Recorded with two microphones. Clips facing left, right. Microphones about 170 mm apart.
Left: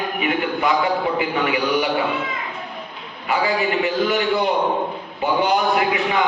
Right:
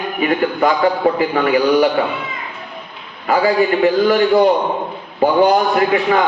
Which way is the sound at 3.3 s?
40° right (ahead or behind).